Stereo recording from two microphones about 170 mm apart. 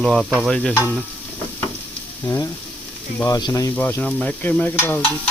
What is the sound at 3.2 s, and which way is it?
Speech, 20° left (ahead or behind).